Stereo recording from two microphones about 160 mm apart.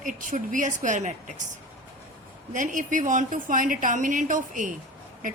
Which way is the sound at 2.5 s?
55° right (ahead or behind).